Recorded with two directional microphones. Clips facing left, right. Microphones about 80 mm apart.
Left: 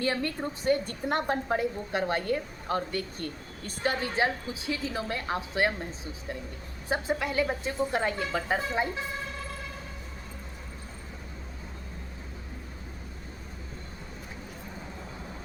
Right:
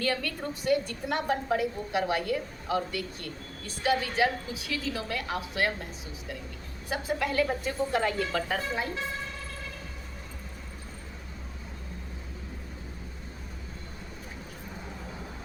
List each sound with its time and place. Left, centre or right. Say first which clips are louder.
0.0 s a woman's voice: left 1 dB; left
6.8 s a woman's voice: left 1 dB; left